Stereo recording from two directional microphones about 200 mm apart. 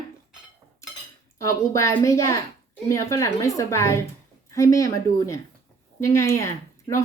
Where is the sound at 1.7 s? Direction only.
15° left (ahead or behind).